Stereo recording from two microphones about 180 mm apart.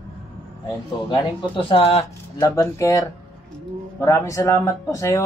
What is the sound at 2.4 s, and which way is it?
Speech, 20° left (ahead or behind).